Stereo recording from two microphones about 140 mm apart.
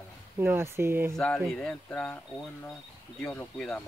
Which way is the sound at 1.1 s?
5° left (ahead or behind).